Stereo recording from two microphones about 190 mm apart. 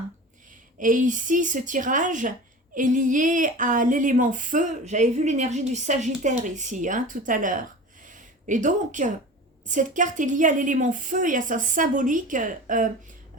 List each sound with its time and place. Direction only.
0.8 s speech: 45° right (ahead or behind)
8.0 s a sound: 45° right (ahead or behind)
9.6 s speech: 45° right (ahead or behind)